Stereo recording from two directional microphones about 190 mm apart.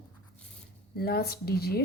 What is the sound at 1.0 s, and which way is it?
Speech, 55° left (ahead or behind).